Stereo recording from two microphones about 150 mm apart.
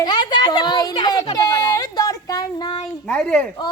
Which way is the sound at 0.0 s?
30° left (ahead or behind).